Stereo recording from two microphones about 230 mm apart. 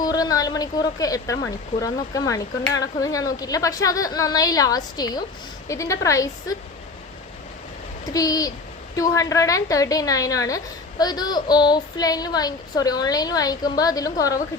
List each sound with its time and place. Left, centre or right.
0.0 s a woman's voice: centre
8.1 s a woman's voice: centre